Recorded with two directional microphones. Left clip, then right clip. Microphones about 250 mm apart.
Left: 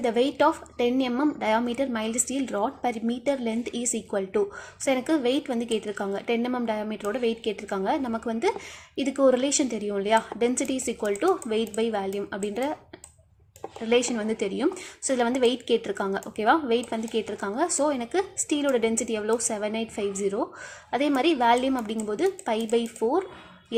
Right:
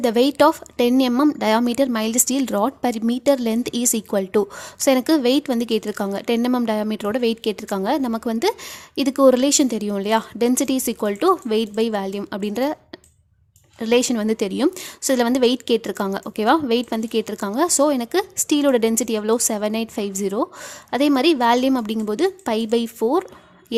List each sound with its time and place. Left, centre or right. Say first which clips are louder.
0.0 s speech: right 6 dB; right
13.8 s speech: right 5 dB; right
23.0 s speech: right 7 dB; right